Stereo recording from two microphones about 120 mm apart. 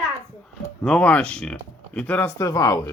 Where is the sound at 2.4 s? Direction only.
30° left (ahead or behind).